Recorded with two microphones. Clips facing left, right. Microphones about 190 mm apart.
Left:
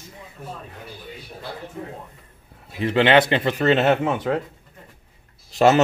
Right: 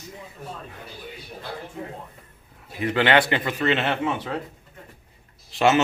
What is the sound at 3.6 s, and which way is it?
Speech, 40° left (ahead or behind).